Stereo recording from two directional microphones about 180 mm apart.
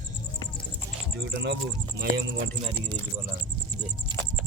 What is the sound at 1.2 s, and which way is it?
Speech, 75° right (ahead or behind).